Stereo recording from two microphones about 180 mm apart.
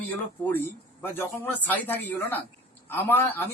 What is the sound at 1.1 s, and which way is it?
Speech, 10° left (ahead or behind).